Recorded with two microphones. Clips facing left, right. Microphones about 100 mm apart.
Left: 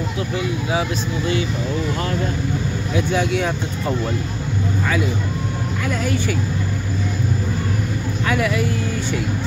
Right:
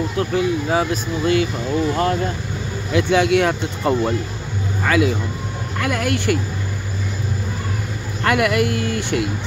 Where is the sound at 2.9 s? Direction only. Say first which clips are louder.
Right 5 dB; 70° right (ahead or behind).